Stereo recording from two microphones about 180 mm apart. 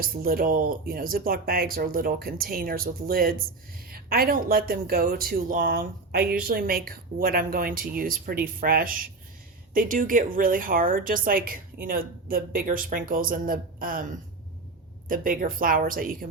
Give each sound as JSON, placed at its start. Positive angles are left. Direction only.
{"t": 0.0, "sound": "a woman's voice", "side_deg": -55}
{"t": 15.1, "sound": "a woman's voice", "side_deg": -50}